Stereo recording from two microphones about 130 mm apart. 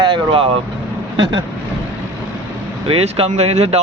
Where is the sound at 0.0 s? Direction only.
40° right (ahead or behind).